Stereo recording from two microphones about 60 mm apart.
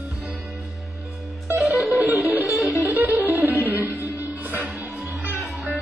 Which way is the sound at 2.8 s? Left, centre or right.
Right.